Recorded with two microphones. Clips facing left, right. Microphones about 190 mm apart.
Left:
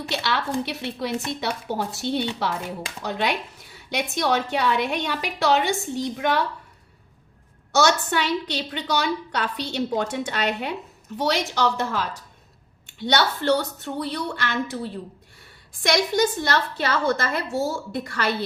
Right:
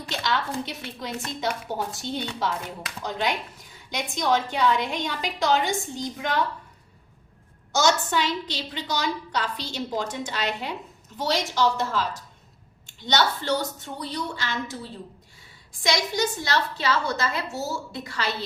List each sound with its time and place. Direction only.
0.1 s a woman's voice: 65° left (ahead or behind)
7.7 s a woman's voice: 65° left (ahead or behind)